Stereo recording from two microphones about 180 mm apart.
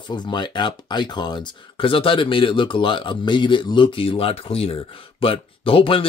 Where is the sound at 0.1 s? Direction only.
25° left (ahead or behind).